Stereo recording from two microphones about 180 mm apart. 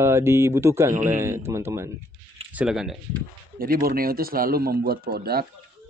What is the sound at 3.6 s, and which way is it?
Speech, 55° right (ahead or behind).